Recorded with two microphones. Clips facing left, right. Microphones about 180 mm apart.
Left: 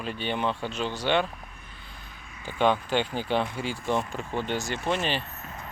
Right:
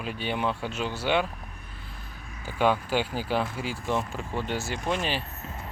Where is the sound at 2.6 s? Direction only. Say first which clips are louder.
Left 1 dB; 5° right (ahead or behind).